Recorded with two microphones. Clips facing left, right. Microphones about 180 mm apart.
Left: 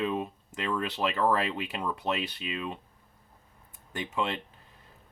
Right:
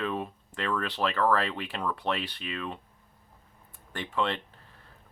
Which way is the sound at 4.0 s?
10° left (ahead or behind).